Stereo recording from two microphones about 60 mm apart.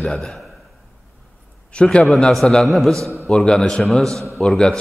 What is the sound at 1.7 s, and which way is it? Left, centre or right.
Speech, centre.